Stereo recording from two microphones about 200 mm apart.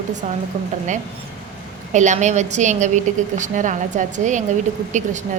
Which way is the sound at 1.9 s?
35° right (ahead or behind).